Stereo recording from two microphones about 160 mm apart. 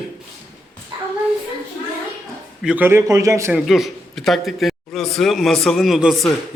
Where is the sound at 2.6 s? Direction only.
10° right (ahead or behind).